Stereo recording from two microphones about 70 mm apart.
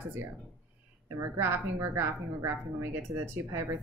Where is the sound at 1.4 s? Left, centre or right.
Right.